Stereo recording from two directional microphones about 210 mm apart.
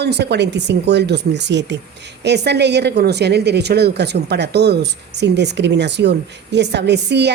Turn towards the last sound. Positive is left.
turn(degrees=-55)  # may be behind; listen again after turning